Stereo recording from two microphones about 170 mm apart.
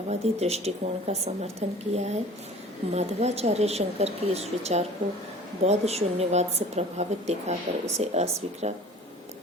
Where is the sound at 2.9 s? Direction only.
40° right (ahead or behind).